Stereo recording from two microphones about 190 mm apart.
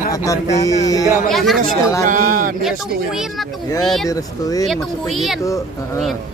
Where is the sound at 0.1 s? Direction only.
15° left (ahead or behind).